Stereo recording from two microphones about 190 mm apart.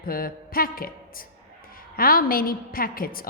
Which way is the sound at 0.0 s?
50° left (ahead or behind).